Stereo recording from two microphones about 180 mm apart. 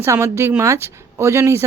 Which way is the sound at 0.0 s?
15° right (ahead or behind).